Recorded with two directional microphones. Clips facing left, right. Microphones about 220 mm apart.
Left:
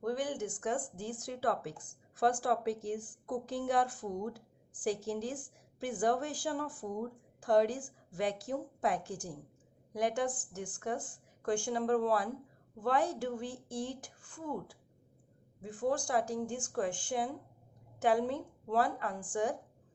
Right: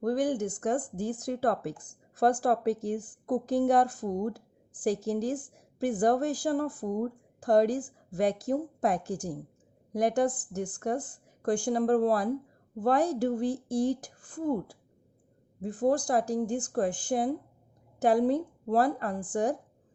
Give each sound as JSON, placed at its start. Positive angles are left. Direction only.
{"t": 0.0, "sound": "speech", "side_deg": -40}